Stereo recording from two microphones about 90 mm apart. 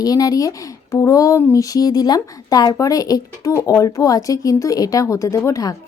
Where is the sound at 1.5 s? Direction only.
40° left (ahead or behind).